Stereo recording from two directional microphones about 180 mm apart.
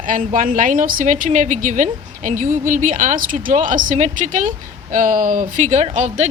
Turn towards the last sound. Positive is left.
turn(degrees=-40)  # may be behind; listen again after turning